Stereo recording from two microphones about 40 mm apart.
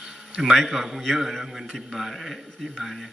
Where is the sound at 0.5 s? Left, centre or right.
Centre.